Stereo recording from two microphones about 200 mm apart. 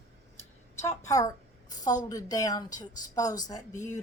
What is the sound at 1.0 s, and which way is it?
A woman's voice, 15° left (ahead or behind).